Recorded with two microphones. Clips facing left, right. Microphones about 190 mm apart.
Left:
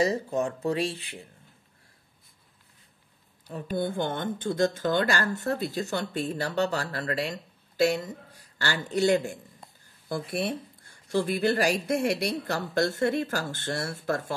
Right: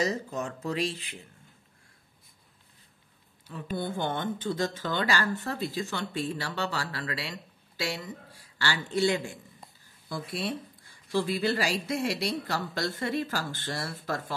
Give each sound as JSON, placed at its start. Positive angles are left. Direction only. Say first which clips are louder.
{"t": 0.0, "sound": "speech", "louder": "left 5 dB", "side_deg": 30}
{"t": 3.4, "sound": "speech", "louder": "left 4 dB", "side_deg": 45}